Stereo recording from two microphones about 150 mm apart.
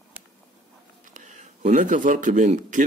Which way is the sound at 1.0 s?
55° right (ahead or behind).